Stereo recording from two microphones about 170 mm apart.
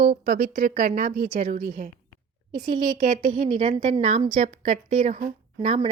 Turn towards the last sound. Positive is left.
turn(degrees=-40)  # may be behind; listen again after turning